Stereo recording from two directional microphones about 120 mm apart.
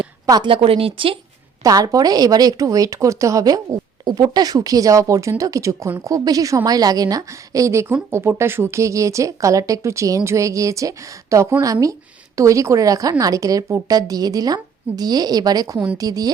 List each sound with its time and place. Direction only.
0.3 s a woman's voice: 35° right (ahead or behind)
0.5 s a woman's voice: 50° right (ahead or behind)
1.6 s a woman's voice: 30° right (ahead or behind)